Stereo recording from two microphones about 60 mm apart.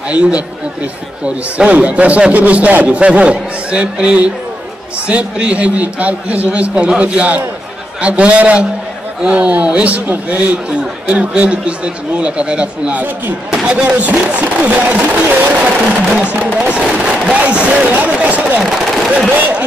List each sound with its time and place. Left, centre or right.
0.1 s a man's voice: centre
13.8 s a man's voice: right